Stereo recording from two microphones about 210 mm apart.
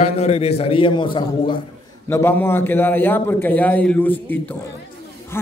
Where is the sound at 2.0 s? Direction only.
10° left (ahead or behind).